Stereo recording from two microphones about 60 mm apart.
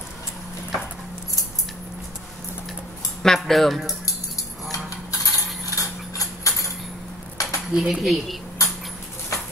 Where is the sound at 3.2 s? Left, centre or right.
Centre.